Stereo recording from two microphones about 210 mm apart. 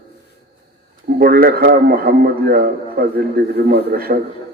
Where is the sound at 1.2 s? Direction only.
45° right (ahead or behind).